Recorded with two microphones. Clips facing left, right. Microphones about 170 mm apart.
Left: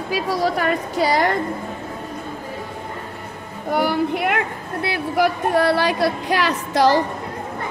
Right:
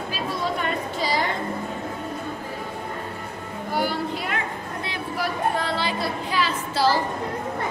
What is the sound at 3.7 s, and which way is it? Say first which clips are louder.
Speech: left 6 dB; 60° left (ahead or behind).